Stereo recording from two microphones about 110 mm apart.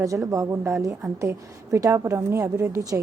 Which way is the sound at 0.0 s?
30° right (ahead or behind).